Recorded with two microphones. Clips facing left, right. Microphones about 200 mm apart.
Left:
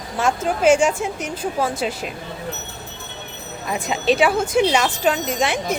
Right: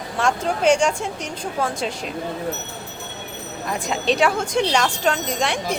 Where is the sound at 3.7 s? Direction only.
5° left (ahead or behind).